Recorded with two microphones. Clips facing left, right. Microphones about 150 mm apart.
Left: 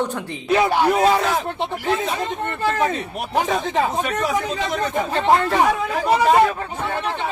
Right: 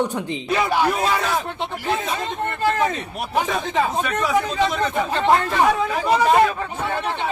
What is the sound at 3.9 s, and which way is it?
Speech, 15° left (ahead or behind).